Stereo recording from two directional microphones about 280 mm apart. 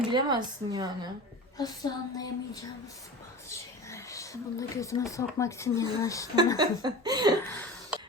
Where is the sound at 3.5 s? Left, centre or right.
Centre.